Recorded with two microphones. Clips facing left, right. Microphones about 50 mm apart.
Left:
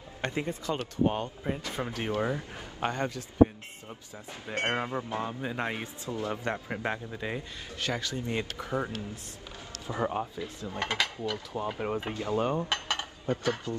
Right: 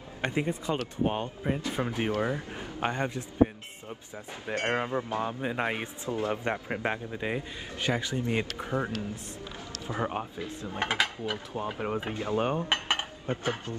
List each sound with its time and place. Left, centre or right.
0.2 s a man's voice: centre
4.6 s a man's voice: right
6.3 s a man's voice: centre
10.7 s mechanisms: centre
12.1 s dishes: right